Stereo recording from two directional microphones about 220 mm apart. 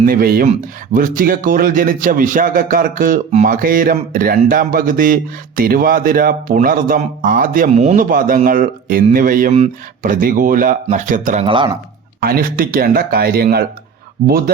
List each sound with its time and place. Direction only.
0.0 s speech: 40° right (ahead or behind)
11.4 s speech: 20° right (ahead or behind)
12.2 s speech: 40° right (ahead or behind)